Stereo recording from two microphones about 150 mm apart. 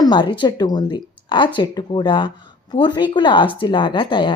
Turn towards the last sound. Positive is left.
turn(degrees=30)  # may be behind; listen again after turning